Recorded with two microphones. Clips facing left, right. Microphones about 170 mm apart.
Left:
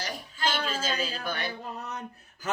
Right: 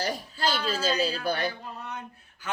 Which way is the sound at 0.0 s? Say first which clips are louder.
Right 3 dB; 40° right (ahead or behind).